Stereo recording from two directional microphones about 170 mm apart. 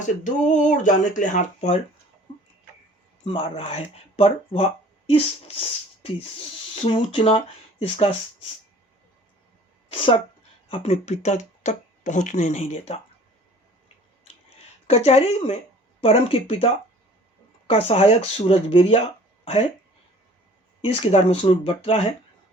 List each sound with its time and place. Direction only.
0.0 s speech: 45° left (ahead or behind)
3.2 s speech: 35° left (ahead or behind)
10.7 s speech: 40° left (ahead or behind)
14.8 s speech: 40° left (ahead or behind)
20.8 s speech: 35° left (ahead or behind)